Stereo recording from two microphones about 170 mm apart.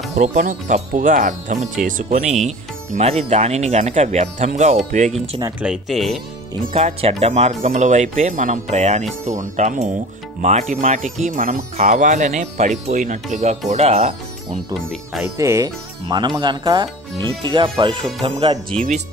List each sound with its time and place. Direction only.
0.1 s speech: 45° right (ahead or behind)
5.6 s speech: 5° right (ahead or behind)
6.7 s speech: 35° right (ahead or behind)
14.7 s speech: centre (ahead or behind)
15.2 s speech: 15° right (ahead or behind); by 18.6 s 35° right (ahead or behind)